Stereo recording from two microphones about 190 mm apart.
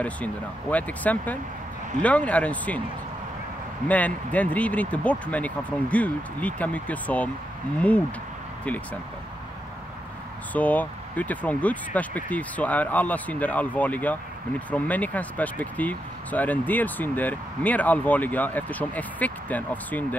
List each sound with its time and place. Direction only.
0.0 s speech: 5° left (ahead or behind)
3.8 s speech: 10° left (ahead or behind)
10.5 s speech: 10° left (ahead or behind)